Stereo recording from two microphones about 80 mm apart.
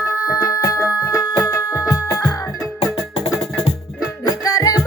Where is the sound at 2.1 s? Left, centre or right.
Left.